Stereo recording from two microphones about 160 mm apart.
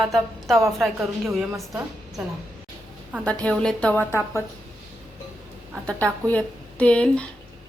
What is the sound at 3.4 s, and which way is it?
Speech, 5° left (ahead or behind).